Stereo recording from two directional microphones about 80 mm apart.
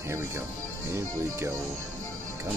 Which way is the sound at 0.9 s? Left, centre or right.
Right.